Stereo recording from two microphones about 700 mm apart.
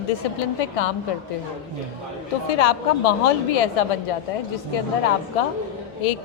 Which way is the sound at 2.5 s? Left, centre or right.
Left.